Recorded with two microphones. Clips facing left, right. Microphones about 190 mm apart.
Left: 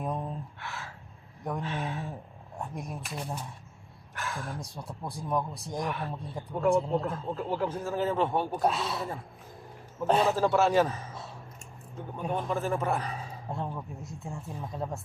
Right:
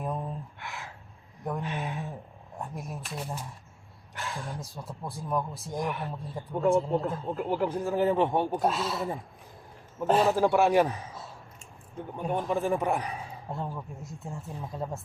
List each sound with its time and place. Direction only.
0.0 s a sound: 5° right (ahead or behind)
0.6 s gasp: 15° right (ahead or behind)
1.6 s a sound: 15° right (ahead or behind)
2.6 s speech: 5° right (ahead or behind)
4.1 s roaring cats: 15° right (ahead or behind)
4.6 s speech: centre (ahead or behind)
7.1 s a man's voice: 15° right (ahead or behind)
8.6 s speech: centre (ahead or behind)
10.1 s speech: centre (ahead or behind)
10.3 s a man's voice: 15° right (ahead or behind)
12.3 s a man's voice: 15° right (ahead or behind)
13.5 s speech: centre (ahead or behind)